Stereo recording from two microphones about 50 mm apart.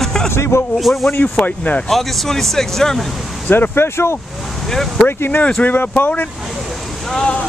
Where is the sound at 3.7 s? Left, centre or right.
Left.